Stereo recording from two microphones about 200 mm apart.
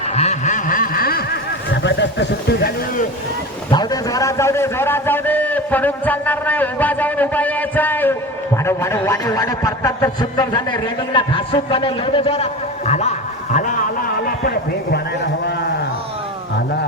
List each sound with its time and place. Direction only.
0.1 s snicker: 35° left (ahead or behind); by 2.7 s 60° left (ahead or behind)
3.7 s a man's voice: 20° left (ahead or behind); by 15.0 s 50° left (ahead or behind)